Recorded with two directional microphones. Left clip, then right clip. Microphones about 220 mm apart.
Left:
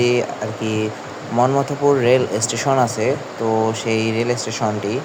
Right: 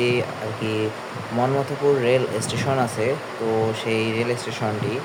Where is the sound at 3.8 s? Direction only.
15° left (ahead or behind).